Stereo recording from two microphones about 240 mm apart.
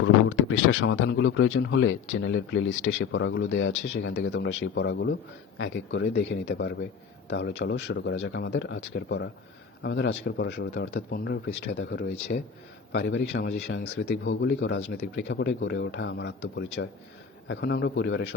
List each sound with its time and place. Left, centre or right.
0.0 s speech: left